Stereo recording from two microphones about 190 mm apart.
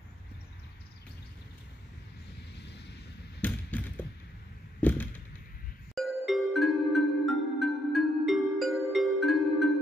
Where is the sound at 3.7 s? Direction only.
10° left (ahead or behind).